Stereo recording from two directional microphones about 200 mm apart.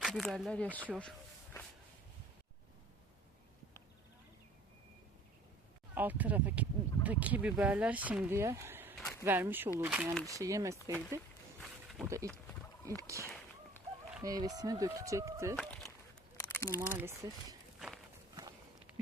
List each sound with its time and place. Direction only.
0.0 s speech: centre (ahead or behind)
0.7 s speech: 10° right (ahead or behind)
5.9 s speech: 10° right (ahead or behind)
10.2 s speech: 15° right (ahead or behind)
11.6 s a sound: centre (ahead or behind)
12.0 s speech: 15° right (ahead or behind)
13.2 s a sound: 10° left (ahead or behind)
14.1 s speech: 15° right (ahead or behind)
15.5 s a sound: centre (ahead or behind)
16.6 s speech: 10° right (ahead or behind)
17.7 s walk: centre (ahead or behind)